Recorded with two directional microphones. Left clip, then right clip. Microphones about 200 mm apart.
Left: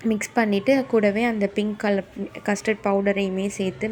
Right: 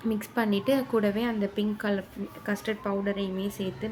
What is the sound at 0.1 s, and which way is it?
Speech, 20° left (ahead or behind).